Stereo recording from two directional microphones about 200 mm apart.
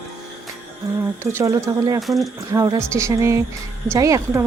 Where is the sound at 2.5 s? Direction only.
15° right (ahead or behind).